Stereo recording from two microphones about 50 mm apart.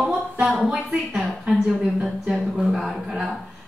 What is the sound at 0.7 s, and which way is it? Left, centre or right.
A woman's voice, centre.